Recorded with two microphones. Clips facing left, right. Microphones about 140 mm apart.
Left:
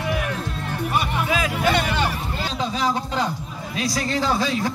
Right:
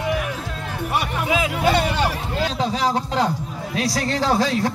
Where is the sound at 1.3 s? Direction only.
20° right (ahead or behind).